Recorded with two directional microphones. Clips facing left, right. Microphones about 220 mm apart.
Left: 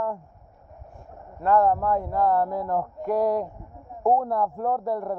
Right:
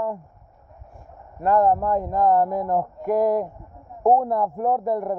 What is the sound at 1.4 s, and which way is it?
Speech, 15° right (ahead or behind).